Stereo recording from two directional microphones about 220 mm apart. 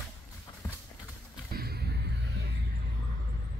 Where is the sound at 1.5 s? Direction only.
45° right (ahead or behind).